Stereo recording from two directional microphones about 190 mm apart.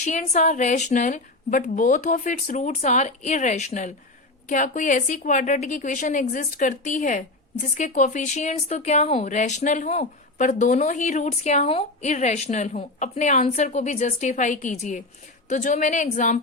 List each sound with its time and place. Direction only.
0.0 s speech: 40° left (ahead or behind)